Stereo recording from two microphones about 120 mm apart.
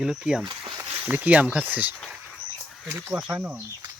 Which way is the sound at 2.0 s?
5° left (ahead or behind).